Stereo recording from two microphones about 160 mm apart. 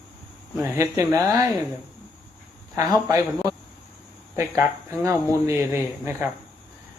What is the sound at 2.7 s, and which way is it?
Speech, 20° right (ahead or behind).